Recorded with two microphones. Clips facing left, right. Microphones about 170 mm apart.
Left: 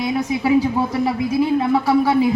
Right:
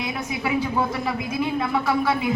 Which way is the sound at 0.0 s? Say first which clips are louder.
Left 7 dB; 30° left (ahead or behind).